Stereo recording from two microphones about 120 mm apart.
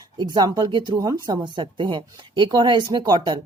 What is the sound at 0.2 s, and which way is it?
A woman's voice, 35° right (ahead or behind).